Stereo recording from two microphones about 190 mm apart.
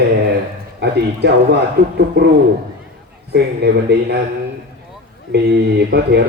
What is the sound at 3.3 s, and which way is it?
Speech, 60° right (ahead or behind).